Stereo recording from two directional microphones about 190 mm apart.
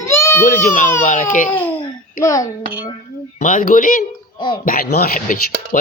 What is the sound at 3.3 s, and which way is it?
Speech, 45° left (ahead or behind).